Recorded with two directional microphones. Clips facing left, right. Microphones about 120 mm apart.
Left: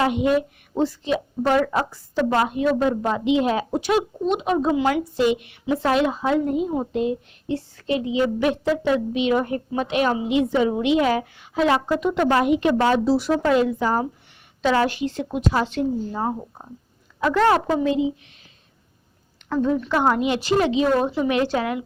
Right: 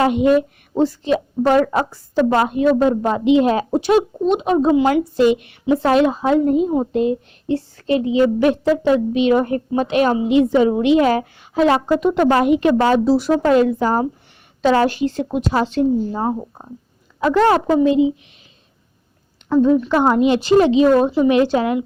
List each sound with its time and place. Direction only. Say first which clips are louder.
0.0 s a woman's voice: right 5 dB; 45° right (ahead or behind)
3.7 s speech: right 6 dB; 30° right (ahead or behind)
5.2 s a woman's voice: right 5 dB; 45° right (ahead or behind)
15.5 s speech: right 8 dB; 30° right (ahead or behind)
19.5 s a woman's voice: right 7 dB; 15° right (ahead or behind)